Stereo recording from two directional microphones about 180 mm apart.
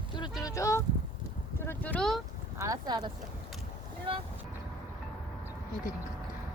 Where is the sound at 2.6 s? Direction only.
20° right (ahead or behind).